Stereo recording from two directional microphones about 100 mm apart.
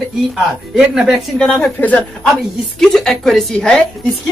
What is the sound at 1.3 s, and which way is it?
Speech, 10° left (ahead or behind).